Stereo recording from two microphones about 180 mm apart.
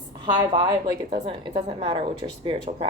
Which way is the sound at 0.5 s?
25° right (ahead or behind).